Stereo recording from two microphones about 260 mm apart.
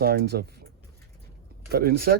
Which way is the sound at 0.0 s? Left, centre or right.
Right.